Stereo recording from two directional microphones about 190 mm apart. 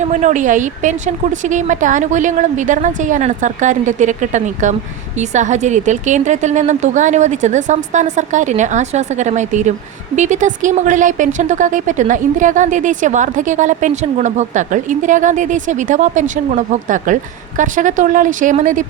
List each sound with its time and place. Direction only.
0.0 s a woman's voice: 40° right (ahead or behind)